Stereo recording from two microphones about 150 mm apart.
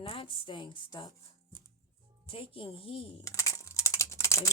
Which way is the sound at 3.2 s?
20° left (ahead or behind).